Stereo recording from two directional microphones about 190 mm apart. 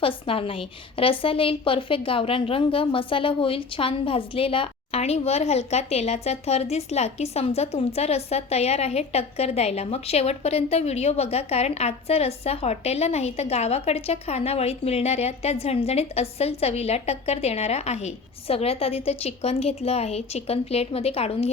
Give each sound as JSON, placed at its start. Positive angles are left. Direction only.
{"t": 0.0, "sound": "a woman's voice", "side_deg": 30}